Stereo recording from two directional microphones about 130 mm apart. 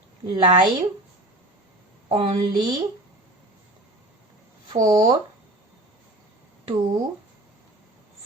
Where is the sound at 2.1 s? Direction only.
45° right (ahead or behind).